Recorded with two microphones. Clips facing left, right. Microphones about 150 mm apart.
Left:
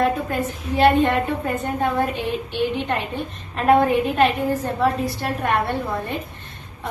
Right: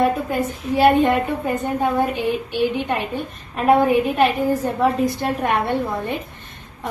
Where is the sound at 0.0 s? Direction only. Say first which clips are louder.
Right 2 dB; 10° right (ahead or behind).